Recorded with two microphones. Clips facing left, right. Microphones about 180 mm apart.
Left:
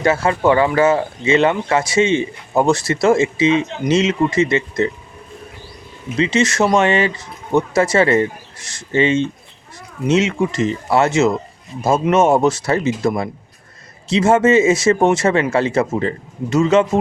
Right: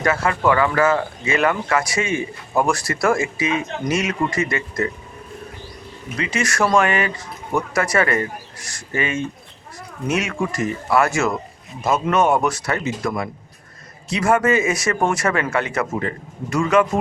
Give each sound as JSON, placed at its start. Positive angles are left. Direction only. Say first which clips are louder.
{"t": 0.0, "sound": "speech", "louder": "left 4 dB", "side_deg": 25}
{"t": 6.1, "sound": "speech", "louder": "left 6 dB", "side_deg": 25}